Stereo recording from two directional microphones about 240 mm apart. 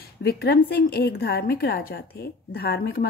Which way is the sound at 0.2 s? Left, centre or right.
Left.